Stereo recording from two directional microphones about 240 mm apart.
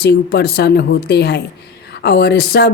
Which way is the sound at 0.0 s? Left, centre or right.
Left.